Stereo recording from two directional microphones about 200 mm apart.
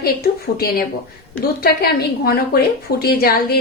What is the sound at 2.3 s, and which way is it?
A woman's voice, 50° left (ahead or behind).